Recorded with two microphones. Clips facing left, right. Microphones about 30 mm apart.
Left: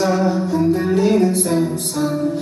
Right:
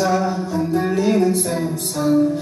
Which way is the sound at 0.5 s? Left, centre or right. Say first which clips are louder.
Left 2 dB; left.